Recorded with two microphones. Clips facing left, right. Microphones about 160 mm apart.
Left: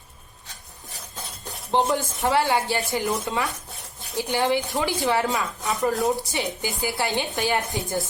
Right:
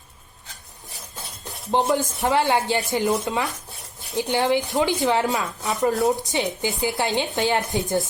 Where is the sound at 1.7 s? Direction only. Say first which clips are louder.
Right 1 dB; 15° right (ahead or behind).